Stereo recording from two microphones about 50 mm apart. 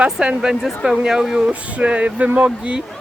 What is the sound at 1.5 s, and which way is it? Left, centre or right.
Speech, right.